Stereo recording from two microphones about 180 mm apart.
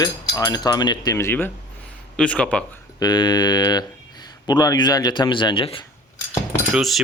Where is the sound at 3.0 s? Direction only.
25° left (ahead or behind).